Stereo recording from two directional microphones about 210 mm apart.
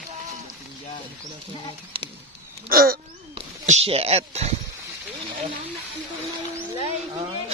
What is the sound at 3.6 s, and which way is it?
Speech, 30° right (ahead or behind).